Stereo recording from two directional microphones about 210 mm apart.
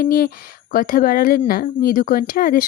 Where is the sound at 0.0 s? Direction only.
45° left (ahead or behind).